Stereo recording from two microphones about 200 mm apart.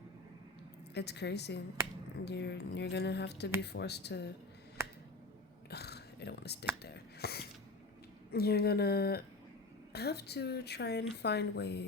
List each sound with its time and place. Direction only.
0.9 s a woman's voice: 55° left (ahead or behind)
5.7 s whispering: 55° left (ahead or behind)
6.8 s a sound: 55° left (ahead or behind)
8.3 s a woman's voice: 50° left (ahead or behind)